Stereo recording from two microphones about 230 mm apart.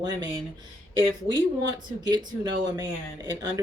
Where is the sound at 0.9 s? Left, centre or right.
Centre.